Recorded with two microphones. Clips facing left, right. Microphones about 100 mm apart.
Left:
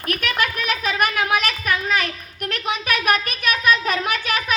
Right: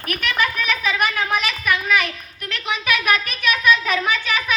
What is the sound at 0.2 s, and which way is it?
Speech, 45° left (ahead or behind).